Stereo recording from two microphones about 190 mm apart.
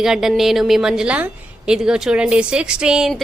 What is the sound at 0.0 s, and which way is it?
A woman's voice, centre (ahead or behind).